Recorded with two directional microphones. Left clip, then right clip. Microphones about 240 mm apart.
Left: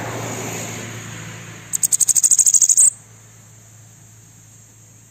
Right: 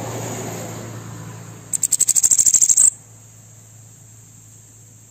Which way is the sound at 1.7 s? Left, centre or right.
Centre.